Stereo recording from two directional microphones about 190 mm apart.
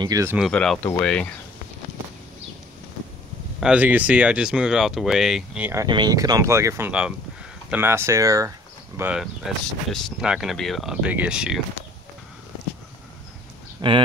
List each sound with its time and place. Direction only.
0.0 s speech: 15° right (ahead or behind)
0.4 s speech: 5° left (ahead or behind)
3.6 s speech: 10° right (ahead or behind)
5.9 s speech: 20° right (ahead or behind); by 11.6 s 5° right (ahead or behind)
13.7 s clip-clop: 25° right (ahead or behind)